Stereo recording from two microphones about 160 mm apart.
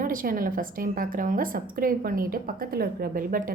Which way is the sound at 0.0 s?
60° right (ahead or behind).